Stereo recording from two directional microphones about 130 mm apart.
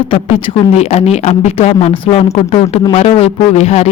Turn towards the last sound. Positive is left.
turn(degrees=55)  # may be behind; listen again after turning